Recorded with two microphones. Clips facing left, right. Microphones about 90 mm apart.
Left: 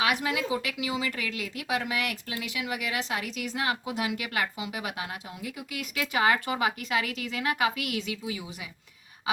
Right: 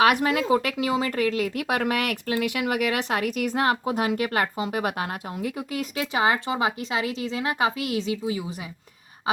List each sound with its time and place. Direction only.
0.0 s speech: 55° right (ahead or behind); by 8.4 s 30° right (ahead or behind)